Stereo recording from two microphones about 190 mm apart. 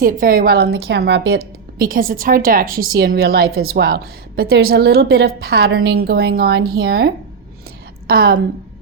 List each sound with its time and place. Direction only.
0.0 s a woman's voice: 45° right (ahead or behind); by 1.4 s 65° right (ahead or behind)
1.8 s a woman's voice: 50° right (ahead or behind)